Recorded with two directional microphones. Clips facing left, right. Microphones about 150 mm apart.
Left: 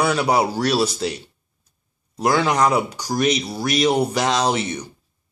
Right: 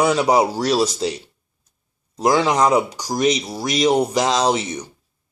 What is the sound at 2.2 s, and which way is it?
Speech, 20° right (ahead or behind).